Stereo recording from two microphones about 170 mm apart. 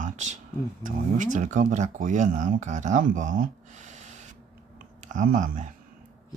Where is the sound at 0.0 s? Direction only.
45° right (ahead or behind).